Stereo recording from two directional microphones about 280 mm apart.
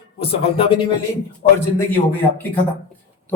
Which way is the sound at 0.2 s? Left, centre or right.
Centre.